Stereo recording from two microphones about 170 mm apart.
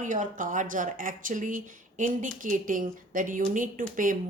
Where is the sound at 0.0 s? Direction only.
50° right (ahead or behind).